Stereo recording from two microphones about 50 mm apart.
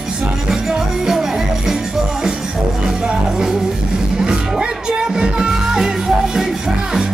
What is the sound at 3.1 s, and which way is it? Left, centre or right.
Music, centre.